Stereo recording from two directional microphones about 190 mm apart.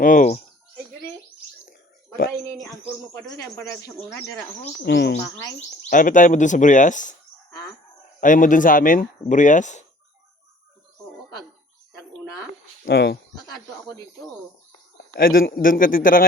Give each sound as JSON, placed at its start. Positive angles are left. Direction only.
{"t": 0.0, "sound": "speech", "side_deg": 45}
{"t": 3.1, "sound": "speech", "side_deg": 20}
{"t": 4.9, "sound": "speech", "side_deg": 60}
{"t": 5.2, "sound": "speech", "side_deg": 15}
{"t": 5.9, "sound": "speech", "side_deg": 45}
{"t": 8.2, "sound": "speech", "side_deg": 45}
{"t": 12.8, "sound": "speech", "side_deg": 60}
{"t": 15.1, "sound": "speech", "side_deg": 50}